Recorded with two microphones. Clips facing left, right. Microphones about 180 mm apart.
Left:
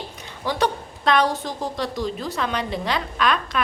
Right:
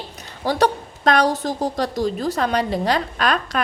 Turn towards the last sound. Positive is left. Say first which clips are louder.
# right 1 dB
turn(degrees=-40)  # may be behind; listen again after turning